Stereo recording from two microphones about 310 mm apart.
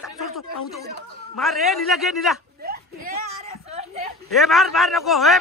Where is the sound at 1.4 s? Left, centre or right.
Centre.